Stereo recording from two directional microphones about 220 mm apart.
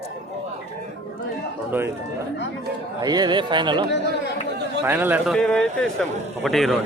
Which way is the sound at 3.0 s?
20° right (ahead or behind).